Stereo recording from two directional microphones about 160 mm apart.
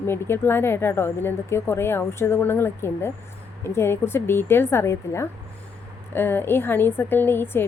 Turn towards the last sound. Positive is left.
turn(degrees=15)  # may be behind; listen again after turning